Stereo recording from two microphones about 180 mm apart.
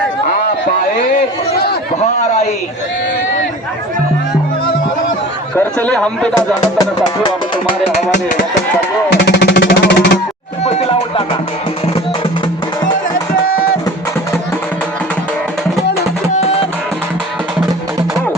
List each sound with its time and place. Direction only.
1.1 s a sound: 60° left (ahead or behind)
5.5 s speech: 5° left (ahead or behind)
6.7 s speech: 25° left (ahead or behind)
9.2 s music: 70° left (ahead or behind)
10.6 s music: 35° left (ahead or behind)
16.3 s music: 35° left (ahead or behind)